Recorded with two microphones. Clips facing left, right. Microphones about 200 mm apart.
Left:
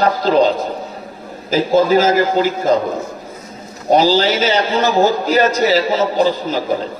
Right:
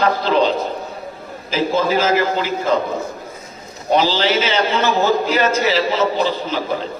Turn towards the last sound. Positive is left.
turn(degrees=40)  # may be behind; listen again after turning